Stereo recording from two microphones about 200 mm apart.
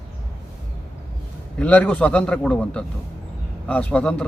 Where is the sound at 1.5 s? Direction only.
5° left (ahead or behind).